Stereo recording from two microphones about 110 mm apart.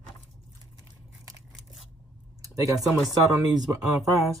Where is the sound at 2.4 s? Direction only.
30° right (ahead or behind).